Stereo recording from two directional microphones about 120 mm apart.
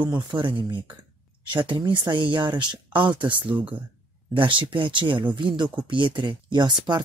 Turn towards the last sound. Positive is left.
turn(degrees=-35)  # may be behind; listen again after turning